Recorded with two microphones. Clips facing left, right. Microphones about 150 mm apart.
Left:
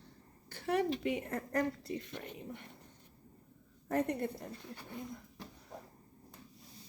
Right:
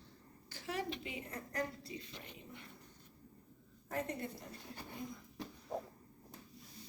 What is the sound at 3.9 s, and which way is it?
Speech, 60° left (ahead or behind).